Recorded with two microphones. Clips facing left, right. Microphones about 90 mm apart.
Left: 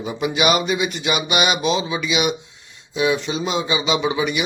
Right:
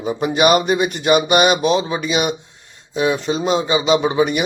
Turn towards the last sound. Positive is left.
turn(degrees=-45)  # may be behind; listen again after turning